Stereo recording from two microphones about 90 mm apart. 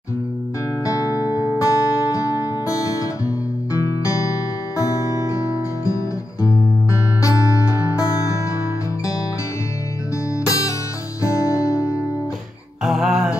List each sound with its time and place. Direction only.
0.8 s music: 40° left (ahead or behind)
1.2 s music: 25° right (ahead or behind)
1.6 s music: 35° left (ahead or behind)
6.4 s guitar: 35° left (ahead or behind)
7.7 s music: 35° left (ahead or behind)
10.4 s music: 35° left (ahead or behind)
12.8 s music: centre (ahead or behind)